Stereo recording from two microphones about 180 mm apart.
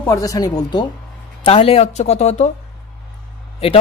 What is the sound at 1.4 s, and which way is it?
Speech, 35° left (ahead or behind).